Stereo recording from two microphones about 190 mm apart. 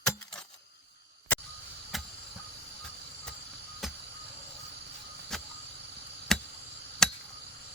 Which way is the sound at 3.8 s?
Centre (ahead or behind).